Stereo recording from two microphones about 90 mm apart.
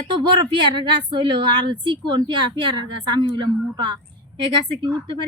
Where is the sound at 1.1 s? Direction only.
60° right (ahead or behind).